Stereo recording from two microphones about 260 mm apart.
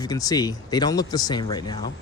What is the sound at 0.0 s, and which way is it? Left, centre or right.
Speech, centre.